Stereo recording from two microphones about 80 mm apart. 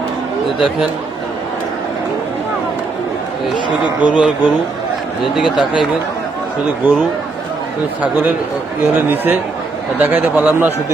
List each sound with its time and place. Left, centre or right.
3.5 s speech: left
4.1 s speech: centre
6.8 s a man's voice: right
9.0 s a man's voice: right